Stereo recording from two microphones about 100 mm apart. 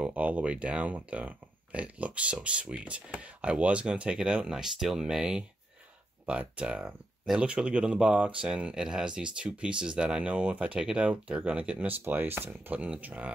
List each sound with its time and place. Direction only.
0.0 s speech: 15° right (ahead or behind)